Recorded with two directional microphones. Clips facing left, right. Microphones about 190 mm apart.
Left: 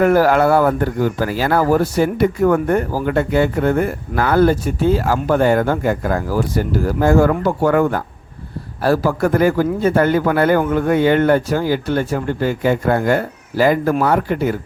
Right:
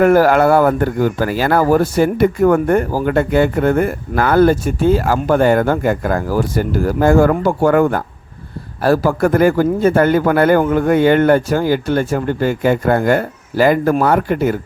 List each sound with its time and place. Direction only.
0.0 s speech: 55° right (ahead or behind)